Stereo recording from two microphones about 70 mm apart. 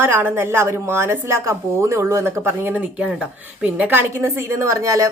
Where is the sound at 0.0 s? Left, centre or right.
Right.